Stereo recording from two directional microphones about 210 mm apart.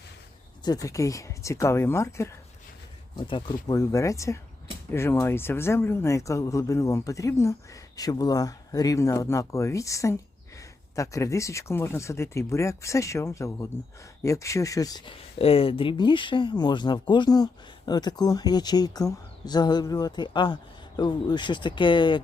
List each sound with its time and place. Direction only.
0.6 s speech: 15° left (ahead or behind)
3.2 s speech: 25° left (ahead or behind)